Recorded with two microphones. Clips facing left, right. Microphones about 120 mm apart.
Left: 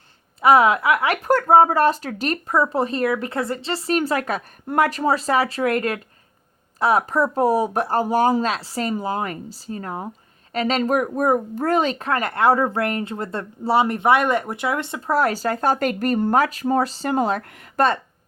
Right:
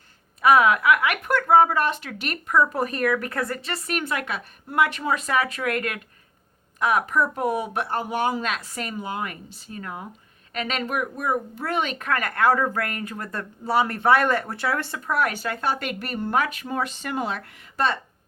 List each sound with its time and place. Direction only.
0.4 s speech: 30° left (ahead or behind)
15.1 s speech: 35° left (ahead or behind)